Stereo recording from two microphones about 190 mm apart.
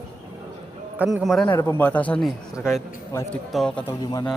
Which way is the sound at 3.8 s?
15° left (ahead or behind).